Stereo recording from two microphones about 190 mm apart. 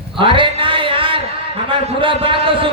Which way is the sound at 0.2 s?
25° right (ahead or behind).